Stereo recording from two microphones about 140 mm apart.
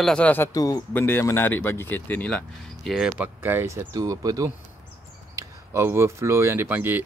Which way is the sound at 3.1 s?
15° right (ahead or behind).